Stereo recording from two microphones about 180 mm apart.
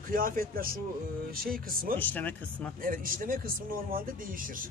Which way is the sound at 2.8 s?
50° right (ahead or behind).